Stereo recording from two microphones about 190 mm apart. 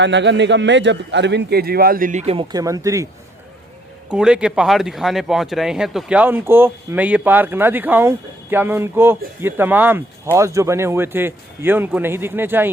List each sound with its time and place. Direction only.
0.0 s a man's voice: 70° right (ahead or behind); by 3.1 s 15° right (ahead or behind)
4.1 s speech: 5° right (ahead or behind)